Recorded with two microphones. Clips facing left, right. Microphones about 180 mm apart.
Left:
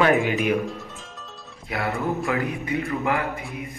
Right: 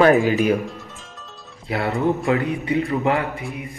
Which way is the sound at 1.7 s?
30° right (ahead or behind).